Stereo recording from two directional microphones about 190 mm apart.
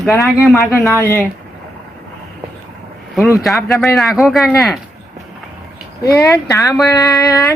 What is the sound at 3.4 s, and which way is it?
A man's voice, centre (ahead or behind).